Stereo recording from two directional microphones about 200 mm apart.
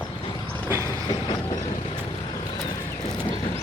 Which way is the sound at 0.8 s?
20° left (ahead or behind).